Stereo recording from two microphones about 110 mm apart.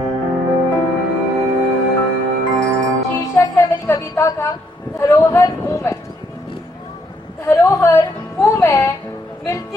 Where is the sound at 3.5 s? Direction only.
25° left (ahead or behind).